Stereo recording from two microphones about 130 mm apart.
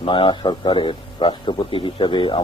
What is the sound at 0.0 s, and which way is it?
A man's voice, 40° left (ahead or behind).